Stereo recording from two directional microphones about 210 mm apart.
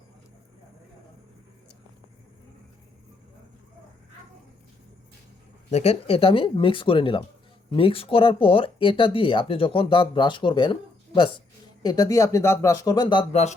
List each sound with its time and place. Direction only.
5.7 s speech: 30° left (ahead or behind)